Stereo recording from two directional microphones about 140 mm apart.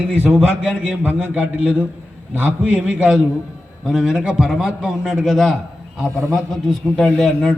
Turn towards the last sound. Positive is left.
turn(degrees=5)  # may be behind; listen again after turning